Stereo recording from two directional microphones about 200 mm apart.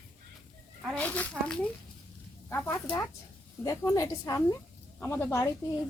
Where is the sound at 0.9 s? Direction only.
5° left (ahead or behind).